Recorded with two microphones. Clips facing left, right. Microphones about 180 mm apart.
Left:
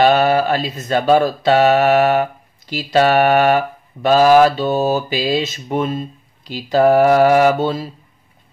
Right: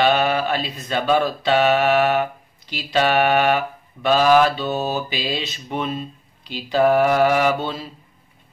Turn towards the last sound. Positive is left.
turn(degrees=45)  # may be behind; listen again after turning